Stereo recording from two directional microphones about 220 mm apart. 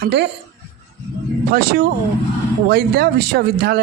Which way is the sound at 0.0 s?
50° right (ahead or behind).